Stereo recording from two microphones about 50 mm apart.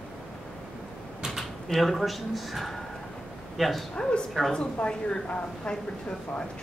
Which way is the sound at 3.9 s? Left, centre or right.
Centre.